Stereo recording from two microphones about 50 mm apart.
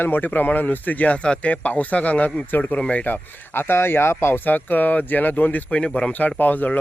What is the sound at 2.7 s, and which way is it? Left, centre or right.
Speech, left.